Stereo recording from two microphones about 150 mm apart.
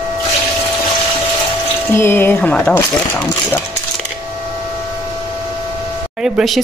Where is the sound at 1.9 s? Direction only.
15° left (ahead or behind).